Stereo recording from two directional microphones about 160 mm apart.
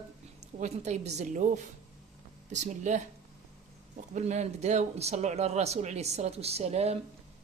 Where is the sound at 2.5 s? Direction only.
50° right (ahead or behind).